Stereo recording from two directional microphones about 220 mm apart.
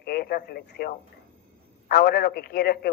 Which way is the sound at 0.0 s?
45° left (ahead or behind).